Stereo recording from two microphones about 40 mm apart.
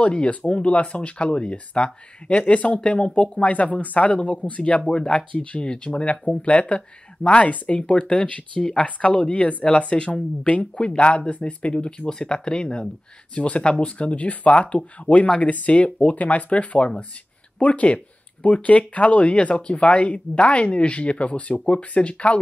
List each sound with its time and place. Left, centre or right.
0.0 s speech: left